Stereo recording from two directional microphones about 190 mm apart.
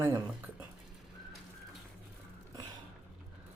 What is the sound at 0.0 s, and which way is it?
Speech, 10° right (ahead or behind).